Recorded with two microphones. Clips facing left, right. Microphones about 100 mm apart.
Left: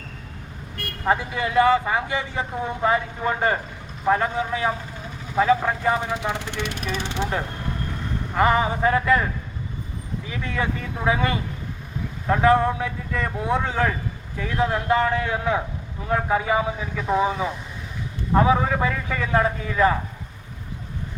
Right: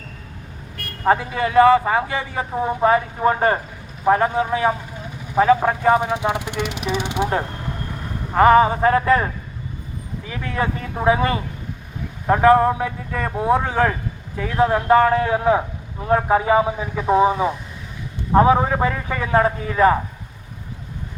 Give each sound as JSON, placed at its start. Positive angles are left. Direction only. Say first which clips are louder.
{"t": 1.0, "sound": "a man's voice", "louder": "right 4 dB", "side_deg": -30}
{"t": 6.0, "sound": "speech", "louder": "right 5 dB", "side_deg": -15}
{"t": 8.4, "sound": "a man's voice", "louder": "right 7 dB", "side_deg": -25}
{"t": 13.1, "sound": "a man's voice", "louder": "right 5 dB", "side_deg": -20}
{"t": 14.9, "sound": "a man's voice", "louder": "right 8 dB", "side_deg": -40}